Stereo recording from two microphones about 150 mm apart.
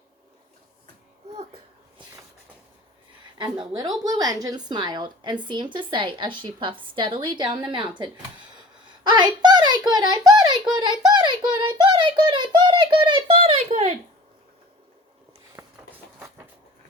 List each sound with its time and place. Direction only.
3.3 s a woman's voice: 30° right (ahead or behind)
9.0 s a sound: 30° right (ahead or behind)
15.6 s vehicle: 15° right (ahead or behind)